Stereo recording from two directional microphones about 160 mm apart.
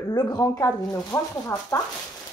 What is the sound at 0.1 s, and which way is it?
Speech, 20° left (ahead or behind).